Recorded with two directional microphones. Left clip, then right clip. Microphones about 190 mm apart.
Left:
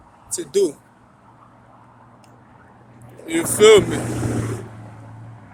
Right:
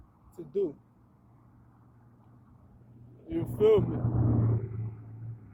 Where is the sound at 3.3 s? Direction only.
20° left (ahead or behind).